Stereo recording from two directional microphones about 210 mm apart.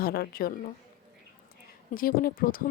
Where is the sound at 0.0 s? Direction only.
45° left (ahead or behind).